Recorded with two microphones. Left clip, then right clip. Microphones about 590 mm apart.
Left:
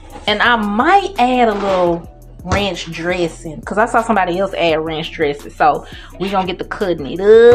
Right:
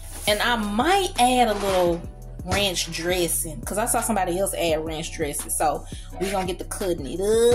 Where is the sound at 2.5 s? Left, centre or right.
Right.